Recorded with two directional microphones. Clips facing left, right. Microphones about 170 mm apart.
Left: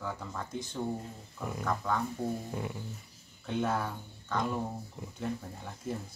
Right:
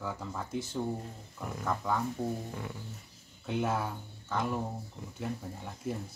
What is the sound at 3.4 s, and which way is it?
Speech, 5° right (ahead or behind).